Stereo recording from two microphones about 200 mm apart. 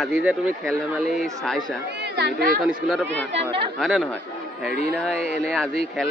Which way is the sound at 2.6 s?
5° left (ahead or behind).